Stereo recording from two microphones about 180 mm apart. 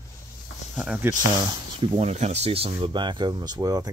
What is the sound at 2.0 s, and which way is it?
Speech, 35° right (ahead or behind).